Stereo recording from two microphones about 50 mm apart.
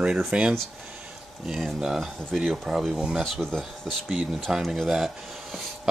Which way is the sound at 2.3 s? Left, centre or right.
Centre.